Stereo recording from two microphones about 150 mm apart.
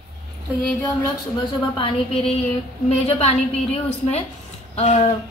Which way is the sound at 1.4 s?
35° left (ahead or behind).